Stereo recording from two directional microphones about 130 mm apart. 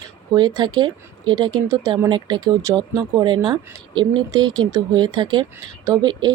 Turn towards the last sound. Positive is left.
turn(degrees=-35)  # may be behind; listen again after turning